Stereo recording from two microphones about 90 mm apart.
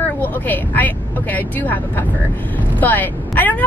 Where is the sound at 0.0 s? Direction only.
20° left (ahead or behind).